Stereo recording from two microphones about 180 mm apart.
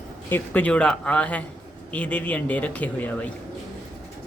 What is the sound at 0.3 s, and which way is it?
A man's voice, 10° left (ahead or behind).